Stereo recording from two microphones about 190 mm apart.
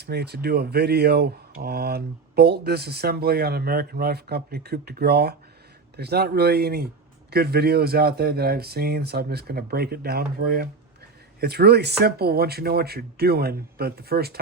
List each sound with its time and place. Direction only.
0.0 s speech: 60° right (ahead or behind)